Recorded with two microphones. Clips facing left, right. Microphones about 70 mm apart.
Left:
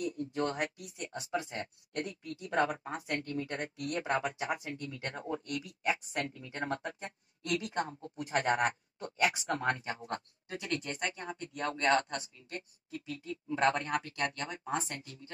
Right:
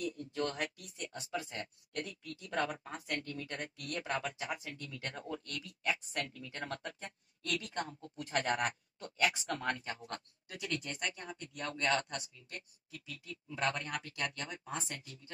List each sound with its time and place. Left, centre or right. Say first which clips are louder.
0.0 s speech: left 3 dB; left